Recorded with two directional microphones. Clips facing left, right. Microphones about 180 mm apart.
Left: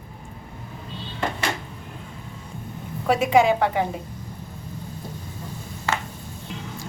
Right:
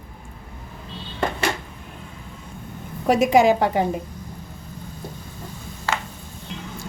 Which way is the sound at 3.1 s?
40° right (ahead or behind).